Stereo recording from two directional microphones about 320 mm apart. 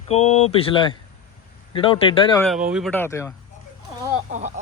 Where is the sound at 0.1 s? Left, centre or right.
Left.